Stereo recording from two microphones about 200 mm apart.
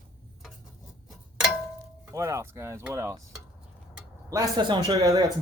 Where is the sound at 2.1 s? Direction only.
15° right (ahead or behind).